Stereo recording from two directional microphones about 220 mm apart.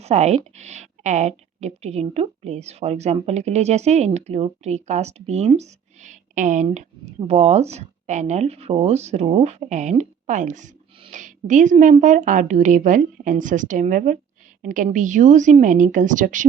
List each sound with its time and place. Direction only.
0.0 s speech: 30° right (ahead or behind)